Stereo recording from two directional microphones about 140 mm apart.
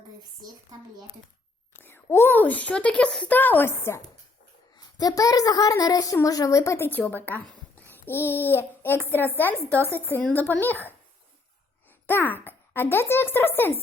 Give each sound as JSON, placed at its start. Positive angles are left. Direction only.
{"t": 1.7, "sound": "speech", "side_deg": 15}
{"t": 7.9, "sound": "child singing", "side_deg": 15}
{"t": 9.0, "sound": "speech", "side_deg": 15}
{"t": 12.0, "sound": "speech", "side_deg": 15}